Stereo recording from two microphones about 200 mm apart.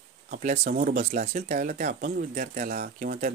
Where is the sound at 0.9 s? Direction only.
35° right (ahead or behind).